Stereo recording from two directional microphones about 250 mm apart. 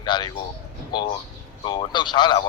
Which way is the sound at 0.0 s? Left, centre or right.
Centre.